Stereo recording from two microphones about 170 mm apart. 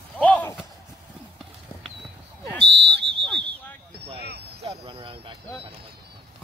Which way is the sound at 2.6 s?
85° right.